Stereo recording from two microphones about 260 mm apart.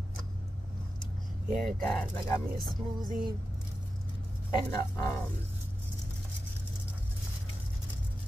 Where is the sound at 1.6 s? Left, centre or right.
Centre.